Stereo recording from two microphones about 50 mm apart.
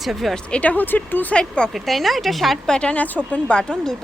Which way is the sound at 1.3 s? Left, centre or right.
Centre.